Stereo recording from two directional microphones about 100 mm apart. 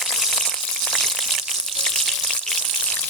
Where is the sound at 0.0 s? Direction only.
Centre (ahead or behind).